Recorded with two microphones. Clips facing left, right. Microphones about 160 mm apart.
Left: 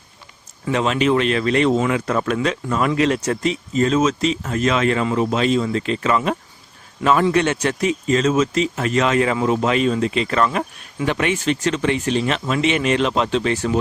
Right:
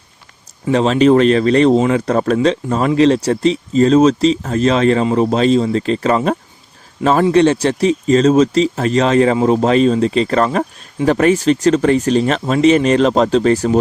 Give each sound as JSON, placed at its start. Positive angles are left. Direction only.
{"t": 0.6, "sound": "speech", "side_deg": -35}